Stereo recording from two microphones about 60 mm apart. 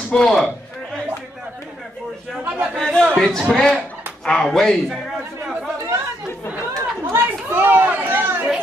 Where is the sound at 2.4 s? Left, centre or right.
Right.